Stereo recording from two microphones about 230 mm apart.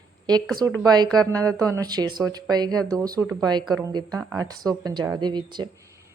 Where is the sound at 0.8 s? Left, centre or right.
Centre.